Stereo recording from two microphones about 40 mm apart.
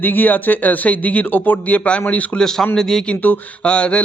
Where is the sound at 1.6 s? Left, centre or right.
Left.